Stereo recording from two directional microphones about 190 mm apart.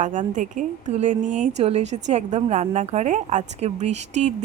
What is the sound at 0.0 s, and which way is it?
A woman's voice, 40° right (ahead or behind).